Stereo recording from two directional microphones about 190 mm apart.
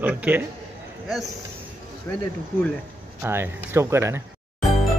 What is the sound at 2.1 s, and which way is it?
Speech, 10° left (ahead or behind).